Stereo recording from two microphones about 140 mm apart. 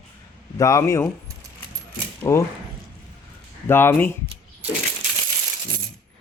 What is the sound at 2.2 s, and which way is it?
Speech, 20° left (ahead or behind).